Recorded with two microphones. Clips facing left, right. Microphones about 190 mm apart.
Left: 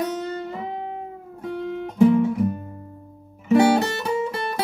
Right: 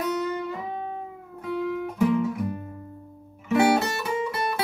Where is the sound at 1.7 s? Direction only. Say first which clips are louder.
Left 7 dB; 35° left (ahead or behind).